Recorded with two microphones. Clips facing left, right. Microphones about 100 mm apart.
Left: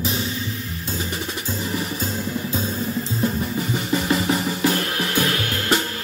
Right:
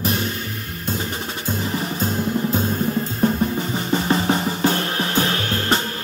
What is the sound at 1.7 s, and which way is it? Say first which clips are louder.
Music: even; 30° right (ahead or behind).